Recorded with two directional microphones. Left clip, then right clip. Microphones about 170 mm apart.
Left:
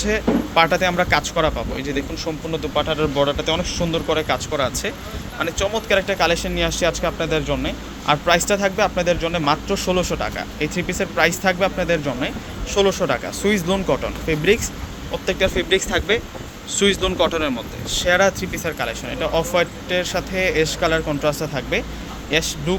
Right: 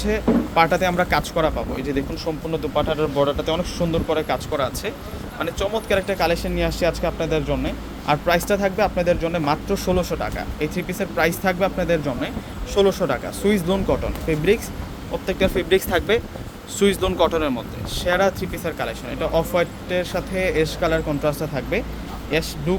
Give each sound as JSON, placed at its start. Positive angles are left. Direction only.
{"t": 0.0, "sound": "speech", "side_deg": -5}
{"t": 17.9, "sound": "speech", "side_deg": -5}